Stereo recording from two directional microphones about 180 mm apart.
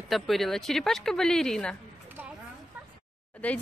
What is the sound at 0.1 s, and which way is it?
Speech, centre (ahead or behind).